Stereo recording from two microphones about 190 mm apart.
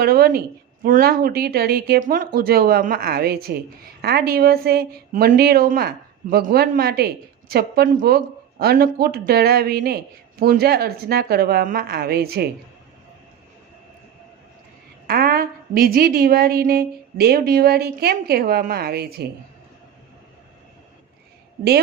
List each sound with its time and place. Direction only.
0.0 s a woman's voice: 55° right (ahead or behind)
15.0 s a woman's voice: 55° right (ahead or behind)